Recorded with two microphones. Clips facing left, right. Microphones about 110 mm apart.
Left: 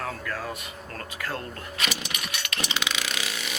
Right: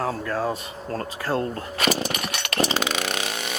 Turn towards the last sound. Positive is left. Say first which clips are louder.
# right 5 dB
turn(degrees=-50)  # may be behind; listen again after turning